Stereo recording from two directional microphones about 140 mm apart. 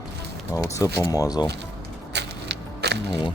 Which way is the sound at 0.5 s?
25° left (ahead or behind).